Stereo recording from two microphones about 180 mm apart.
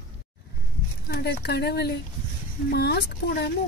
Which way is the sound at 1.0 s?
65° left (ahead or behind).